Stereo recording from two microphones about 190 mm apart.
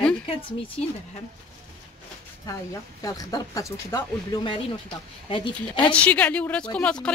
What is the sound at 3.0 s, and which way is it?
Speech, 20° left (ahead or behind).